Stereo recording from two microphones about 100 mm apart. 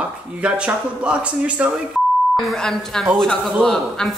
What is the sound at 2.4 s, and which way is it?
A woman's voice, 5° left (ahead or behind).